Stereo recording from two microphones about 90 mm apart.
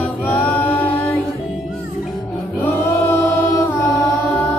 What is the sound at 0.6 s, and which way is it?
Music, 20° left (ahead or behind).